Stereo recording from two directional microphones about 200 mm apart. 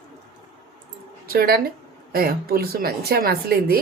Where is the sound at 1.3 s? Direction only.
50° right (ahead or behind).